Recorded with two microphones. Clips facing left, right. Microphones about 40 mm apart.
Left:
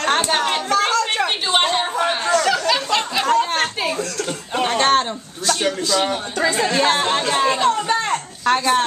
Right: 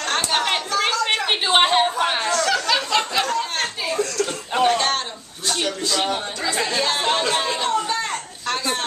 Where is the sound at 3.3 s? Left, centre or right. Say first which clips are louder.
Left 6 dB; left.